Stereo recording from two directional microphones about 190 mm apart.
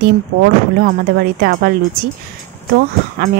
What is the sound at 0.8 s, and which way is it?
Speech, 55° right (ahead or behind).